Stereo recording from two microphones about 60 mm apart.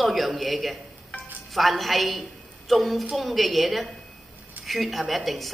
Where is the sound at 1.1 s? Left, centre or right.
Left.